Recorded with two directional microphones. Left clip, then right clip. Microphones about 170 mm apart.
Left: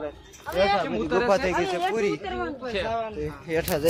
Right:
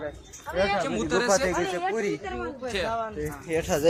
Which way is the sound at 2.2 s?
65° left (ahead or behind).